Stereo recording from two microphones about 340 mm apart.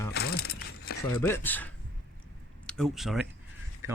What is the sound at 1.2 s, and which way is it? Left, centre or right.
Speech, centre.